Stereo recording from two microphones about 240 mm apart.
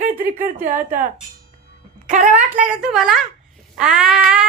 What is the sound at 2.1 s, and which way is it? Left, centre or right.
Speech, right.